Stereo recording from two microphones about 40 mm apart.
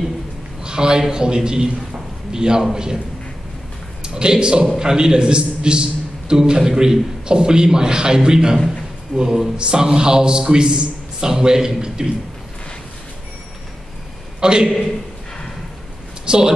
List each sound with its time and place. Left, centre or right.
0.7 s a man's voice: centre
4.0 s a man's voice: centre
14.4 s a man's voice: centre
16.3 s a woman's voice: centre